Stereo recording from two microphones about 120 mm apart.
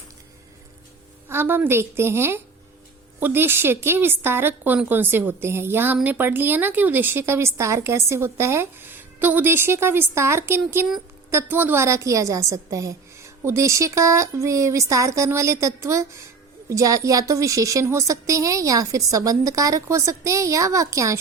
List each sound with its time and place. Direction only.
1.3 s a woman's voice: 20° right (ahead or behind)